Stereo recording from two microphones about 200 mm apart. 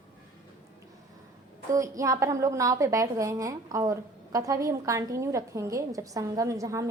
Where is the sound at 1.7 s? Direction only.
15° right (ahead or behind).